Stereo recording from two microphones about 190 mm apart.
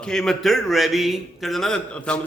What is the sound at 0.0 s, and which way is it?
A man's voice, centre (ahead or behind).